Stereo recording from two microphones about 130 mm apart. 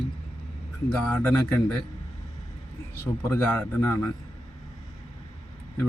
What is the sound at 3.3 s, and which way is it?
Speech, 15° left (ahead or behind).